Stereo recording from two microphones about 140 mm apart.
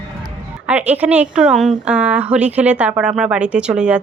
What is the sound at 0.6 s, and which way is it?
Speech, 10° right (ahead or behind).